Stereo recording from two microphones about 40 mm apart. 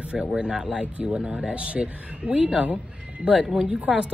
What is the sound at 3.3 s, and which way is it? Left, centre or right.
Speech, centre.